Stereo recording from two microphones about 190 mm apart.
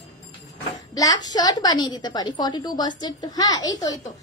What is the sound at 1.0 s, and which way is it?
A woman's voice, 20° left (ahead or behind).